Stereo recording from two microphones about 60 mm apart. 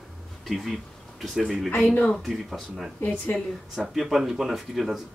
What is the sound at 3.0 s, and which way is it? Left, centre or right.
Speech, left.